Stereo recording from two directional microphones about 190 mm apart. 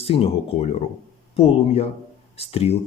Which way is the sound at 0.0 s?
30° left (ahead or behind).